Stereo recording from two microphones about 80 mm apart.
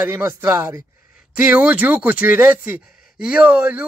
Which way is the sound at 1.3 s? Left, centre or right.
Centre.